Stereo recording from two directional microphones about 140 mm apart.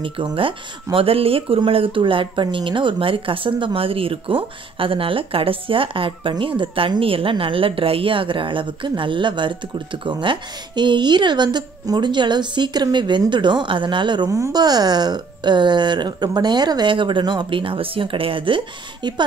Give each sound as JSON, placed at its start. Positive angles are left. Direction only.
{"t": 0.0, "sound": "speech", "side_deg": -40}